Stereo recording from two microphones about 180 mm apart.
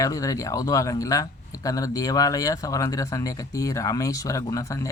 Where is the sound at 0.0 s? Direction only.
20° left (ahead or behind).